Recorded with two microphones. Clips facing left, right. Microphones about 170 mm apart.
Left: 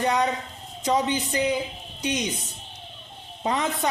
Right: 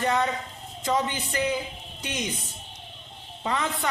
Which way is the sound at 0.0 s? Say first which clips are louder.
Left 2 dB; 15° left (ahead or behind).